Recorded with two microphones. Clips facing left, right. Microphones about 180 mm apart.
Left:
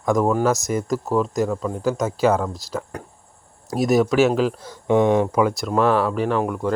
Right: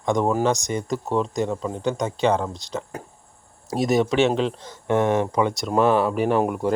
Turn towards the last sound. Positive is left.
turn(degrees=-20)  # may be behind; listen again after turning